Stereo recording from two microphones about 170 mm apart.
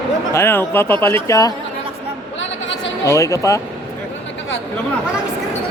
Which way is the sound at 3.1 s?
20° left (ahead or behind).